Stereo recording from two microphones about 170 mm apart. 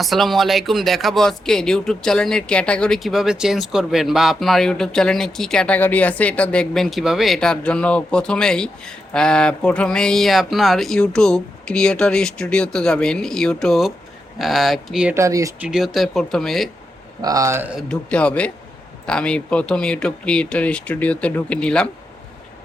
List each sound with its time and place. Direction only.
0.0 s speech: centre (ahead or behind)
15.1 s speech: 20° right (ahead or behind)
15.6 s speech: centre (ahead or behind)
17.2 s speech: 20° right (ahead or behind)
17.7 s a man's voice: 5° left (ahead or behind)